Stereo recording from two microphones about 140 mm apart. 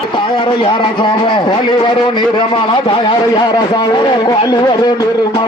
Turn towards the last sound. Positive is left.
turn(degrees=30)  # may be behind; listen again after turning